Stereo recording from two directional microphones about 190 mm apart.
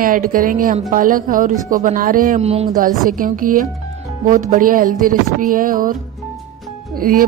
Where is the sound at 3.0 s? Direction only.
45° right (ahead or behind).